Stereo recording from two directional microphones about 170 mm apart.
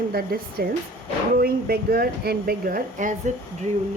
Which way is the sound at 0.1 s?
60° right (ahead or behind).